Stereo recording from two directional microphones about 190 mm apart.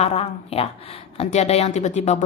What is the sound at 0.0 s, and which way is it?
Speech, 30° left (ahead or behind).